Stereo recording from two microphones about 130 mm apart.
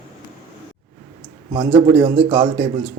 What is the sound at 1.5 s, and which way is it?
Speech, 50° right (ahead or behind).